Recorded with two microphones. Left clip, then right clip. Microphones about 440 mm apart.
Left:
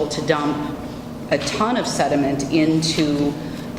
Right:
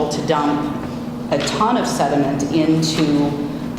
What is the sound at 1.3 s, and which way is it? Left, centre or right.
A man's voice, left.